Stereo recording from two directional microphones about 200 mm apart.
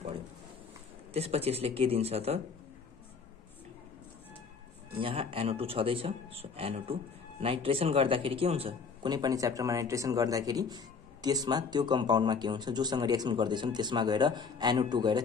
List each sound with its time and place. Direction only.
1.1 s speech: 30° right (ahead or behind)
5.0 s speech: 25° right (ahead or behind)